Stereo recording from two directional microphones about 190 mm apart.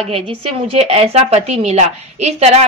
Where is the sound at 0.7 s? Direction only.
35° right (ahead or behind).